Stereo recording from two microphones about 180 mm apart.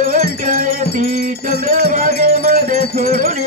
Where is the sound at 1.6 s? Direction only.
40° right (ahead or behind).